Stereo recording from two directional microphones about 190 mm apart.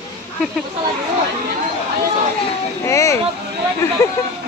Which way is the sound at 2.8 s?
15° left (ahead or behind).